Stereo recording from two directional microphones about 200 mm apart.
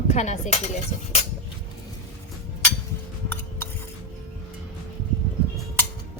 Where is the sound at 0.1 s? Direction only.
35° left (ahead or behind).